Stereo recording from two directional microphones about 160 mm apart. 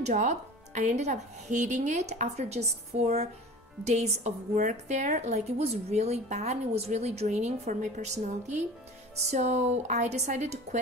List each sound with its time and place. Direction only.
0.0 s a woman's voice: 50° right (ahead or behind)